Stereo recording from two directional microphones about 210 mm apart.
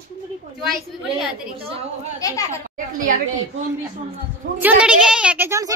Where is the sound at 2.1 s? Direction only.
15° left (ahead or behind).